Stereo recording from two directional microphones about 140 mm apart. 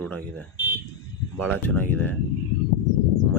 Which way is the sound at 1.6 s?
15° left (ahead or behind).